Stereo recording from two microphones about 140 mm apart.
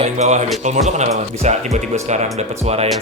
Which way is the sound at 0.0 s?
55° right (ahead or behind).